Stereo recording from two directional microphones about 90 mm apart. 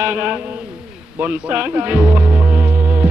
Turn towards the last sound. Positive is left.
turn(degrees=-15)  # may be behind; listen again after turning